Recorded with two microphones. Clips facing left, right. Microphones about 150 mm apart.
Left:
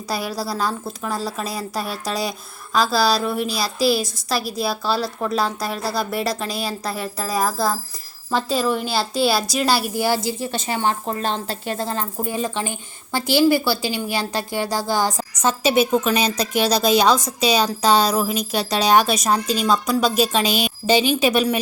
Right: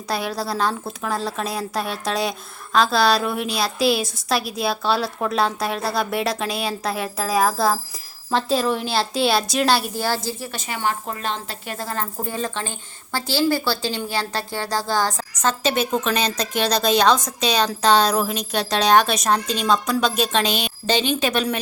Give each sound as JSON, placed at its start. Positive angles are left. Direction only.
{"t": 0.1, "sound": "a woman's voice", "side_deg": 5}
{"t": 10.5, "sound": "a woman's voice", "side_deg": 30}